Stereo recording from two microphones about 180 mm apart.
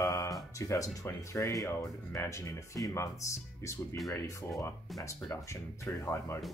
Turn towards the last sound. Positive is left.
turn(degrees=15)  # may be behind; listen again after turning